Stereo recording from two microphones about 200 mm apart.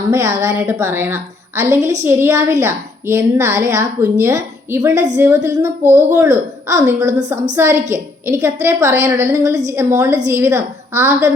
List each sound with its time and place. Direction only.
0.1 s a woman's voice: 15° right (ahead or behind)